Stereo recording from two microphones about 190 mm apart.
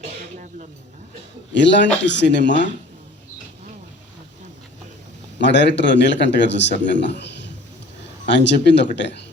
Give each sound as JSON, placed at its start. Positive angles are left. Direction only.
{"t": 1.5, "sound": "a man's voice", "side_deg": 65}
{"t": 5.4, "sound": "a man's voice", "side_deg": 65}